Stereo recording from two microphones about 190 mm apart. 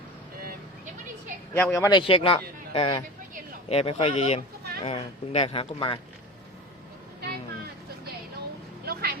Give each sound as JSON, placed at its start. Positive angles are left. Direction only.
{"t": 1.5, "sound": "speech", "side_deg": 10}
{"t": 8.9, "sound": "vehicle", "side_deg": -55}